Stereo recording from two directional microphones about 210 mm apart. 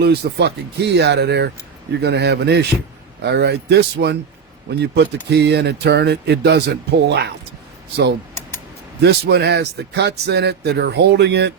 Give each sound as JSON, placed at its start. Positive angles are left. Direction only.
{"t": 0.0, "sound": "speech", "side_deg": -50}
{"t": 9.0, "sound": "speech", "side_deg": -50}